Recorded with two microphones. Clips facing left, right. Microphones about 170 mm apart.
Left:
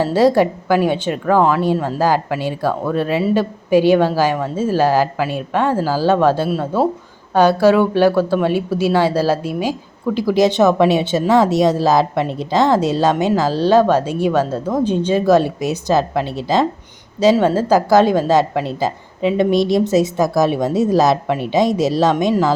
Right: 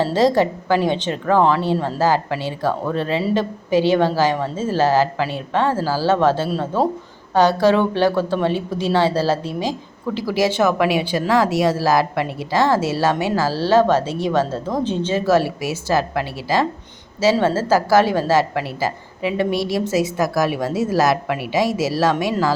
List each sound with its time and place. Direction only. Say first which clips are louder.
0.0 s a woman's voice: left 3 dB; 10° left (ahead or behind)